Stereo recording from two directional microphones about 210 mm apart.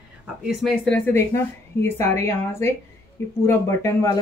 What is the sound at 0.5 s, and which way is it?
Speech, centre (ahead or behind).